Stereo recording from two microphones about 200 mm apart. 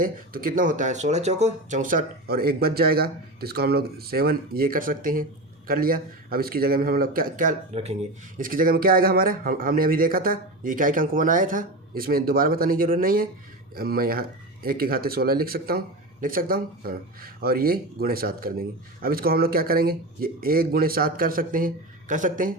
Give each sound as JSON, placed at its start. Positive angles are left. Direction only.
{"t": 0.0, "sound": "speech", "side_deg": -45}